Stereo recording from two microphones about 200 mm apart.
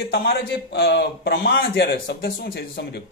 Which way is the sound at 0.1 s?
55° left (ahead or behind).